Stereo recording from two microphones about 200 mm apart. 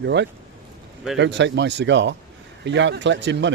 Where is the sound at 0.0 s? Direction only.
60° right (ahead or behind).